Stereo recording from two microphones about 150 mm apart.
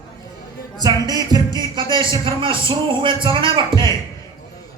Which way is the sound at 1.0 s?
25° right (ahead or behind).